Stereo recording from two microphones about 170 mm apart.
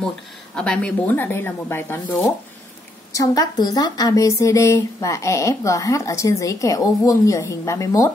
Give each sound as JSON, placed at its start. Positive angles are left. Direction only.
{"t": 0.6, "sound": "speech", "side_deg": 5}